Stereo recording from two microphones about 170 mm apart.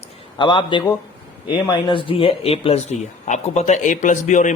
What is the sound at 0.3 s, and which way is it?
A man's voice, 30° left (ahead or behind).